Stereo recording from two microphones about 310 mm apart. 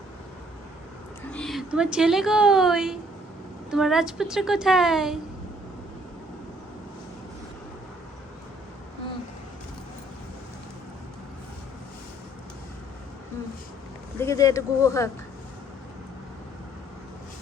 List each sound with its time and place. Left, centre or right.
1.3 s a woman's voice: centre
14.2 s speech: centre